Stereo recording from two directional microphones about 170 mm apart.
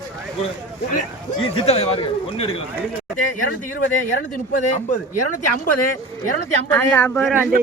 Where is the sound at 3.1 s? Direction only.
50° left (ahead or behind).